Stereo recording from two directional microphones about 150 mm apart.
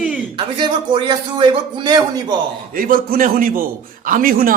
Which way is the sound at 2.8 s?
70° right (ahead or behind).